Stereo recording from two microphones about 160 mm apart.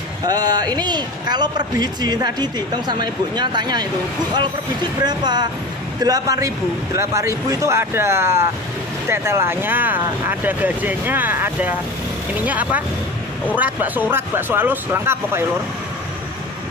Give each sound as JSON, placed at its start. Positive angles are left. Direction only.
{"t": 0.3, "sound": "a man's voice", "side_deg": -25}
{"t": 5.0, "sound": "a man's voice", "side_deg": -25}